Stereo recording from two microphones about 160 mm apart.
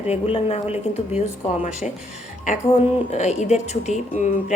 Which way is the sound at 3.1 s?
45° left (ahead or behind).